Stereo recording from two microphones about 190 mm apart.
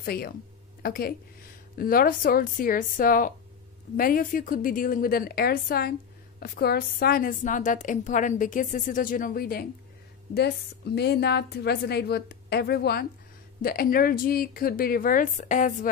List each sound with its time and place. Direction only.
0.0 s a woman's voice: 55° left (ahead or behind)
11.0 s a woman's voice: 60° left (ahead or behind); by 15.9 s 45° left (ahead or behind)